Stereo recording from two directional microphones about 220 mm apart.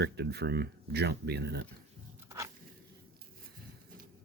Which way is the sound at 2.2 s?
15° right (ahead or behind).